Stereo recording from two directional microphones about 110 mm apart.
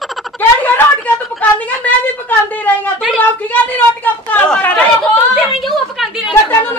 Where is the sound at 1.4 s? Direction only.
15° left (ahead or behind).